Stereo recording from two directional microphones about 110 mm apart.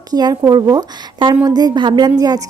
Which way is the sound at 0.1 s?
35° right (ahead or behind).